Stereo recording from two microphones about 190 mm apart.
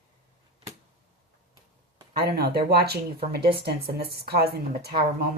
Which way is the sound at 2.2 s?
55° right (ahead or behind).